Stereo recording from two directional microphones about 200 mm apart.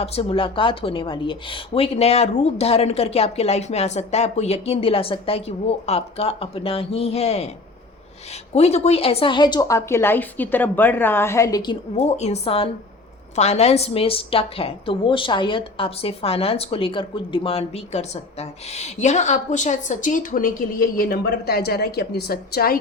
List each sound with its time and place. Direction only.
0.0 s a woman's voice: 30° left (ahead or behind)
8.5 s a woman's voice: 30° left (ahead or behind); by 22.8 s 50° left (ahead or behind)